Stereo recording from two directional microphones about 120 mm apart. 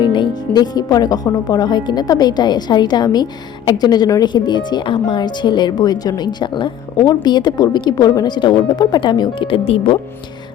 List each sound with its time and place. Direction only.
0.0 s speech: 40° left (ahead or behind)